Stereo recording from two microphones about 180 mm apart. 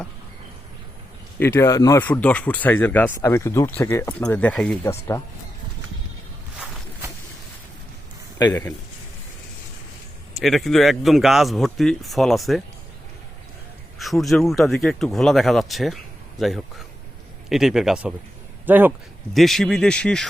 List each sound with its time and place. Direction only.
1.4 s speech: 15° left (ahead or behind)
4.8 s speech: 15° left (ahead or behind)
10.3 s speech: centre (ahead or behind)
14.0 s speech: centre (ahead or behind)
19.3 s speech: centre (ahead or behind)